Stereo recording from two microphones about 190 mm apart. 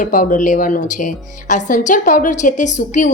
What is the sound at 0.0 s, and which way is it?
A woman's voice, 45° left (ahead or behind).